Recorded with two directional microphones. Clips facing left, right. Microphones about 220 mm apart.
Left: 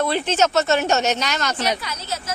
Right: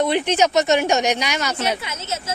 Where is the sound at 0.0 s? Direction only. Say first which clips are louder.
Right 2 dB; 15° right (ahead or behind).